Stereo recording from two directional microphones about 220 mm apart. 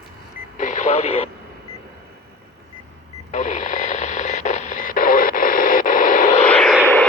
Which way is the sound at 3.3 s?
35° left (ahead or behind).